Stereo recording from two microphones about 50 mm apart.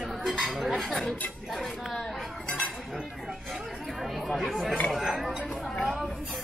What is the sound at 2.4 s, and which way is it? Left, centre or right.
Chink, centre.